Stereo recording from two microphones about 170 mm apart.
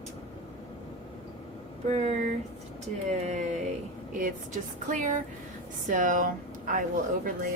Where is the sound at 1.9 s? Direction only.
40° right (ahead or behind).